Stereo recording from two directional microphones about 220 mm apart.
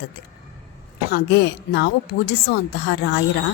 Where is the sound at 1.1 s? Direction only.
50° left (ahead or behind).